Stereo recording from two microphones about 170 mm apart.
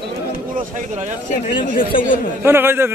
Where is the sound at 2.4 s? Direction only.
15° right (ahead or behind).